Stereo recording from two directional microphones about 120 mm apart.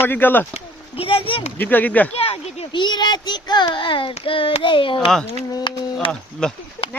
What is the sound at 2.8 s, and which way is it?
A child's voice, 35° left (ahead or behind).